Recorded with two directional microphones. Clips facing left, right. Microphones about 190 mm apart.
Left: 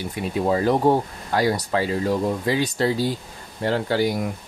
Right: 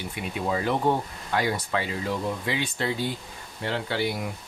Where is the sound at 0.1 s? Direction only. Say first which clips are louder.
Left 7 dB; 40° left (ahead or behind).